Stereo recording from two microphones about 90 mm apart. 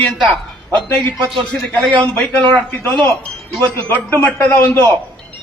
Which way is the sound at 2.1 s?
15° left (ahead or behind).